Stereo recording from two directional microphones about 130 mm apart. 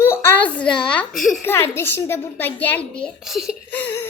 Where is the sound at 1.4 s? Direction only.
20° left (ahead or behind).